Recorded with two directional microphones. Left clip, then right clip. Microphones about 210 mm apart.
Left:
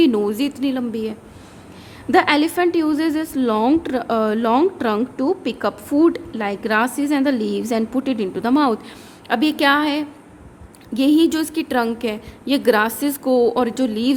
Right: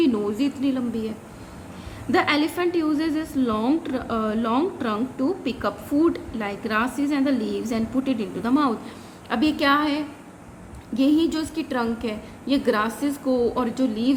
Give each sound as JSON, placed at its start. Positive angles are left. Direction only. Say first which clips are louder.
{"t": 0.0, "sound": "a woman's voice", "louder": "left 5 dB", "side_deg": 45}